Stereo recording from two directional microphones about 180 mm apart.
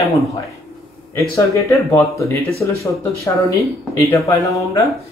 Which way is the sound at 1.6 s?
15° left (ahead or behind).